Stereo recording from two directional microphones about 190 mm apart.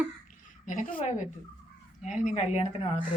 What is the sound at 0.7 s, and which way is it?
Speech, 40° left (ahead or behind).